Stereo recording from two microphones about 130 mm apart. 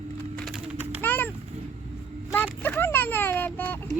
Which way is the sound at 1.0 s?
15° left (ahead or behind).